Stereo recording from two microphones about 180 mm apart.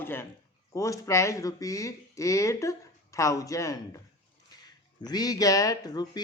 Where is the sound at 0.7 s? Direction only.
20° left (ahead or behind).